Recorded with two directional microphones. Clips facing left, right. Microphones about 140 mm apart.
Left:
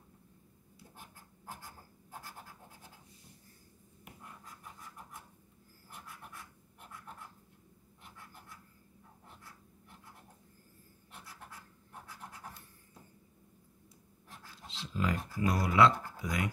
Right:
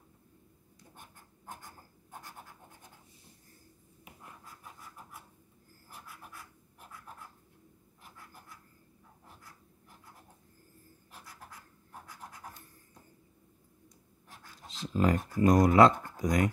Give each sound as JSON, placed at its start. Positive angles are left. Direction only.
{"t": 6.0, "sound": "scratch", "side_deg": 0}
{"t": 14.7, "sound": "speech", "side_deg": -45}